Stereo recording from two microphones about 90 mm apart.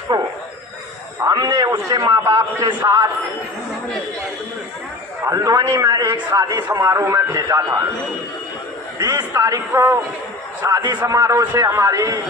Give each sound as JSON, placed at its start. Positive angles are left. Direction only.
{"t": 0.1, "sound": "a sound", "side_deg": -55}
{"t": 1.9, "sound": "a man's voice", "side_deg": -45}
{"t": 5.2, "sound": "a man's voice", "side_deg": -35}
{"t": 9.0, "sound": "a man's voice", "side_deg": -45}
{"t": 9.5, "sound": "a man's voice", "side_deg": -35}